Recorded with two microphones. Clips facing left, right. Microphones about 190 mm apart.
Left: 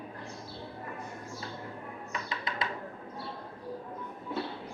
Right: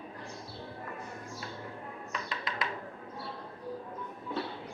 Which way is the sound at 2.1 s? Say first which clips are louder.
Left 1 dB; 25° left (ahead or behind).